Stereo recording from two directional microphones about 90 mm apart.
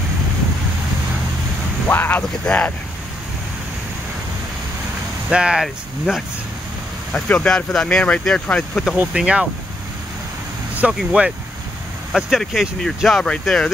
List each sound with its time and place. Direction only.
1.9 s a sound: 25° left (ahead or behind)
2.4 s speech: 15° left (ahead or behind)
5.3 s speech: 10° right (ahead or behind)
7.4 s speech: 5° left (ahead or behind)
8.9 s speech: 15° right (ahead or behind)
10.7 s speech: 15° right (ahead or behind); by 13.7 s 5° left (ahead or behind)